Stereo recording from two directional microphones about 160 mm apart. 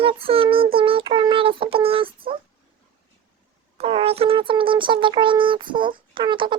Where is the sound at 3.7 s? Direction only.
40° right (ahead or behind).